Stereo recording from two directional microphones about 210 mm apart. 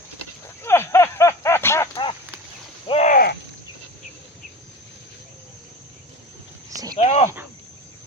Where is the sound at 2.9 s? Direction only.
35° left (ahead or behind).